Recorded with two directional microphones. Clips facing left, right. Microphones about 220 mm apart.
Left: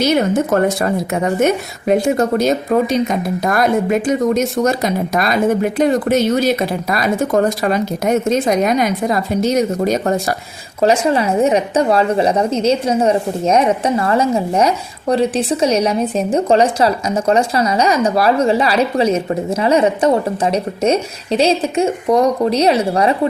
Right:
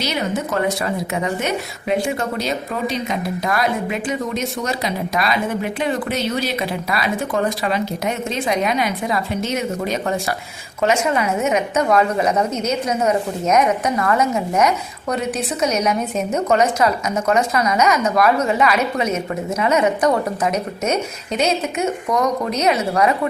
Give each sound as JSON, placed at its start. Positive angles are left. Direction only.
{"t": 0.0, "sound": "a woman's voice", "side_deg": 50}